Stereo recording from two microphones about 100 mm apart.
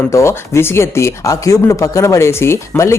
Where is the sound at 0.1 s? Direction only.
30° left (ahead or behind).